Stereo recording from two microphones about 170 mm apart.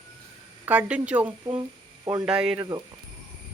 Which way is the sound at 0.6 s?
10° right (ahead or behind).